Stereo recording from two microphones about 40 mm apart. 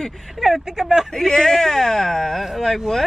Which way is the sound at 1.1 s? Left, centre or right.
Centre.